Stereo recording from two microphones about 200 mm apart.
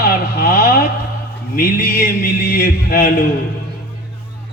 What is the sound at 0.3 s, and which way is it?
Vehicle, 45° left (ahead or behind).